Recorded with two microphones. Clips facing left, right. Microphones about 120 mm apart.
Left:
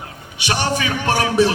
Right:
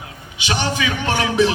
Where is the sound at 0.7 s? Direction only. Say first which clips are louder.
Left 2 dB; 45° left (ahead or behind).